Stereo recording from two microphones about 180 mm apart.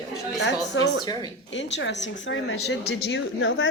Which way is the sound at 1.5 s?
85° left.